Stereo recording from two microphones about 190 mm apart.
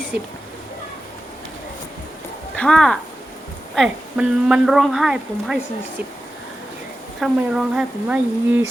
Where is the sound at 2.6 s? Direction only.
5° left (ahead or behind).